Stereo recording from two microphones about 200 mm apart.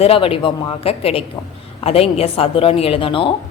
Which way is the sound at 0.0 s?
30° left (ahead or behind).